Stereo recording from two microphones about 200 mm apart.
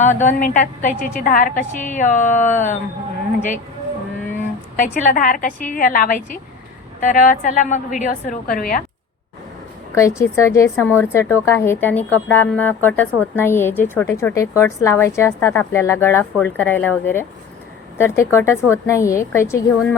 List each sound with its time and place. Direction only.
0.0 s a woman's voice: 35° left (ahead or behind)
4.8 s a woman's voice: 40° left (ahead or behind)
9.9 s a woman's voice: 15° left (ahead or behind)